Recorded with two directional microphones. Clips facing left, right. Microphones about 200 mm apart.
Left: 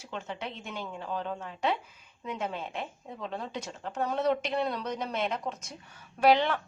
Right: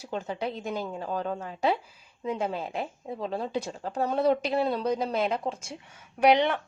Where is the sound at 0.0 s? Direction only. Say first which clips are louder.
Right 6 dB; 35° right (ahead or behind).